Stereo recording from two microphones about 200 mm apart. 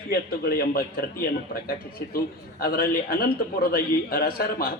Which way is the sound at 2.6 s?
50° left (ahead or behind).